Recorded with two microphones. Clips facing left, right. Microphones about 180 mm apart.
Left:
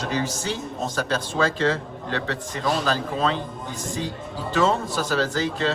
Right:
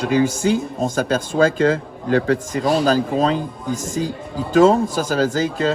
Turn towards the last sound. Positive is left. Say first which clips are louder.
# right 5 dB
turn(degrees=-45)  # may be behind; listen again after turning